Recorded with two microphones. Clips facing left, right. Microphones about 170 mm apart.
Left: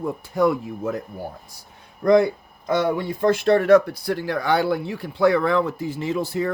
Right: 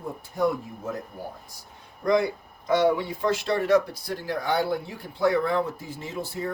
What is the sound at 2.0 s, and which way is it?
Speech, 50° left (ahead or behind).